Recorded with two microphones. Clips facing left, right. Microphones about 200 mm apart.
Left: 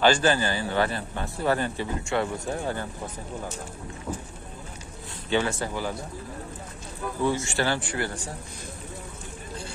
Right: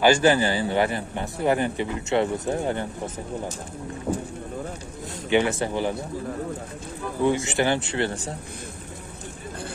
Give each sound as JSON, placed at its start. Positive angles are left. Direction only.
{"t": 0.0, "sound": "a man's voice", "side_deg": -15}
{"t": 5.3, "sound": "a man's voice", "side_deg": -20}
{"t": 7.2, "sound": "a man's voice", "side_deg": -20}